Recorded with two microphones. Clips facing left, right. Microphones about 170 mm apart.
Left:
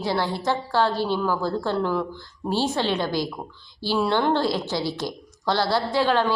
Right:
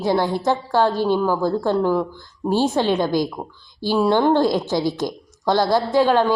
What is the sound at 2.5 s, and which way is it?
A woman's voice, 50° right (ahead or behind).